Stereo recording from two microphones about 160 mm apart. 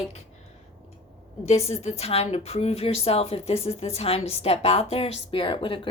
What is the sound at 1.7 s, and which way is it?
Speech, 45° left (ahead or behind).